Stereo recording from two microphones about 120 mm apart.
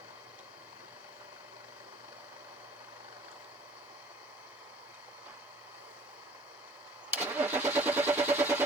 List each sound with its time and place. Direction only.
7.2 s vehicle: 15° right (ahead or behind)